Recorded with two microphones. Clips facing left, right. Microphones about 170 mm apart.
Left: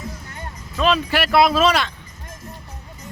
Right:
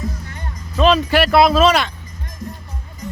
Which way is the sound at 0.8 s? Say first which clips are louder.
Right 5 dB; 30° right (ahead or behind).